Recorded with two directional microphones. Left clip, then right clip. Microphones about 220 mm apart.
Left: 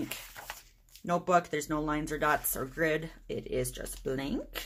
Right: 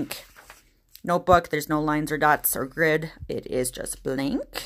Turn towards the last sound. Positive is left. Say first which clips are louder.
# right 7 dB
turn(degrees=-45)  # may be behind; listen again after turning